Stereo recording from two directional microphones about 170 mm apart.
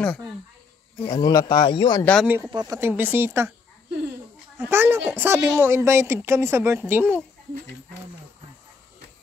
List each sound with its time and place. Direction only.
0.0 s speech: 5° left (ahead or behind)
1.2 s speech: 25° left (ahead or behind)
2.2 s speech: 10° right (ahead or behind)
4.6 s speech: 15° right (ahead or behind)